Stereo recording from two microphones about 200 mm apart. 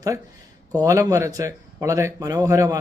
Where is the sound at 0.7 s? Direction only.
15° right (ahead or behind).